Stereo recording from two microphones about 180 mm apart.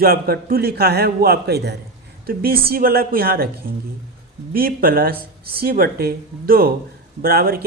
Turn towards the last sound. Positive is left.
turn(degrees=-55)  # may be behind; listen again after turning